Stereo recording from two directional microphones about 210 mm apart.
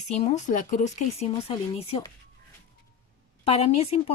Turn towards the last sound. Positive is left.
turn(degrees=30)  # may be behind; listen again after turning